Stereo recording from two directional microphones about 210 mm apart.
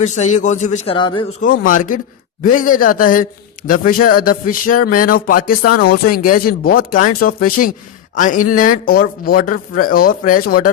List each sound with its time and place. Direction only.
0.0 s a man's voice: 35° left (ahead or behind)
0.9 s speech: 20° left (ahead or behind)
1.4 s a man's voice: 40° left (ahead or behind)